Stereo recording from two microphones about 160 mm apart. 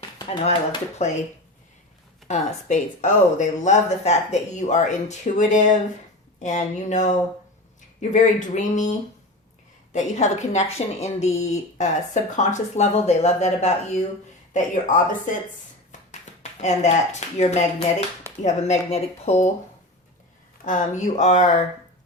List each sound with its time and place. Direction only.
0.3 s speech: 40° left (ahead or behind)
2.2 s a woman's voice: 45° left (ahead or behind)
8.1 s a woman's voice: 50° left (ahead or behind)
9.9 s a woman's voice: 45° left (ahead or behind)
16.4 s a woman's voice: 45° left (ahead or behind)
20.7 s a woman's voice: 50° left (ahead or behind)